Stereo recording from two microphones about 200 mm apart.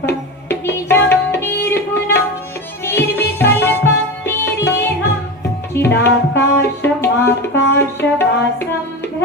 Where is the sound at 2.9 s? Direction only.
10° left (ahead or behind).